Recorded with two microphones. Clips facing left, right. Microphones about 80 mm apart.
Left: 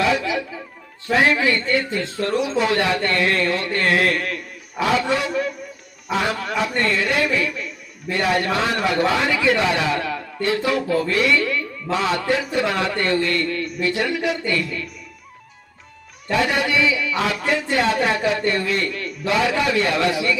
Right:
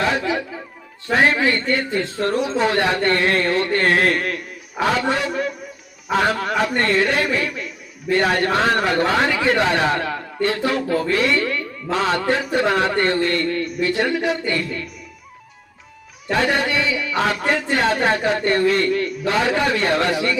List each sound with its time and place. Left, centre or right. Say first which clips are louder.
0.0 s chatter: even; right
1.3 s a man's voice: even; right
16.3 s speech: right 1 dB; right